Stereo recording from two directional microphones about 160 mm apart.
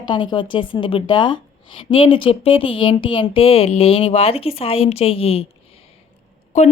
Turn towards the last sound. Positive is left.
turn(degrees=45)  # may be behind; listen again after turning